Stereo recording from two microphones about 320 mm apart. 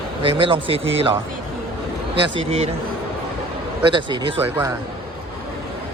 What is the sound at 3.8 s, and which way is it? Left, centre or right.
Speech, centre.